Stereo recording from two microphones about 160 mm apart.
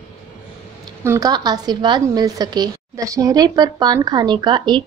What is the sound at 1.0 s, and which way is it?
A woman's voice, 25° right (ahead or behind).